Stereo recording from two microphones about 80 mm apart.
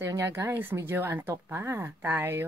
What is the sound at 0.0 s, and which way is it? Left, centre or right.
A woman's voice, right.